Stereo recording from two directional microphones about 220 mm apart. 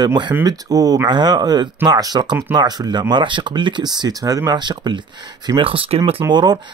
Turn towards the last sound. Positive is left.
turn(degrees=-20)  # may be behind; listen again after turning